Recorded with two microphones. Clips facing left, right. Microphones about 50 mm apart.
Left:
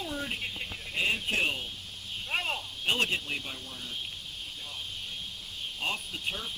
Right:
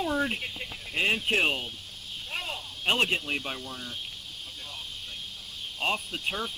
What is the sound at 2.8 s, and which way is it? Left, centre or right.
Speech, right.